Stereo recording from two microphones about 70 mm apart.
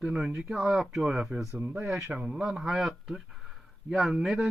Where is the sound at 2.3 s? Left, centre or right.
Centre.